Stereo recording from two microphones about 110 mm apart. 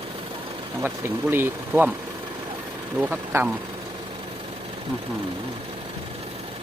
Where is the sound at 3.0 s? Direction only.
15° right (ahead or behind).